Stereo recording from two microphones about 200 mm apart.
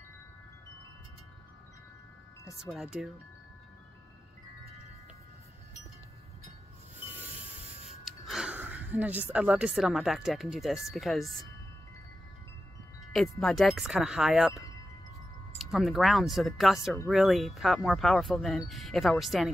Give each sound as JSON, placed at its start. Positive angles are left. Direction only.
{"t": 2.6, "sound": "wind chime", "side_deg": 0}
{"t": 7.2, "sound": "a sound", "side_deg": -5}
{"t": 13.0, "sound": "wind chime", "side_deg": 0}
{"t": 15.5, "sound": "wind chime", "side_deg": 0}